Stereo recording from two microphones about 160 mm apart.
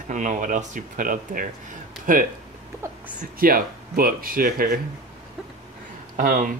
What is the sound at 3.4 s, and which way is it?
Speech, 65° right (ahead or behind).